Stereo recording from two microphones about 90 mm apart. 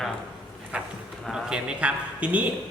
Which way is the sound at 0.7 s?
15° right (ahead or behind).